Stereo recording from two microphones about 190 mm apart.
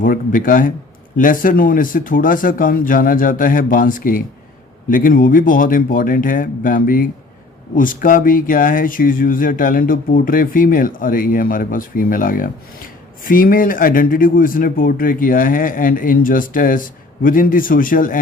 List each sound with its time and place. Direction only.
0.0 s speech: 45° left (ahead or behind)